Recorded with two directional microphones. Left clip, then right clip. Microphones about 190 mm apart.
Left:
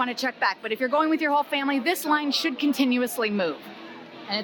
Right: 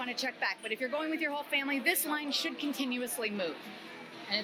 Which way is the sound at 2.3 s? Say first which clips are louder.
Left 9 dB; 35° left (ahead or behind).